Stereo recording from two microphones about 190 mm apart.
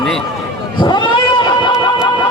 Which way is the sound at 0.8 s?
25° left (ahead or behind).